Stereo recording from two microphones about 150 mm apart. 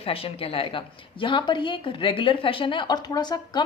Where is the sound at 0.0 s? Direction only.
40° left (ahead or behind).